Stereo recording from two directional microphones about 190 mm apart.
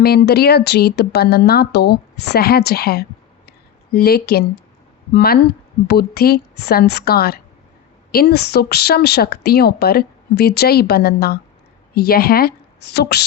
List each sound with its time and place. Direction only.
0.0 s speech: 55° left (ahead or behind)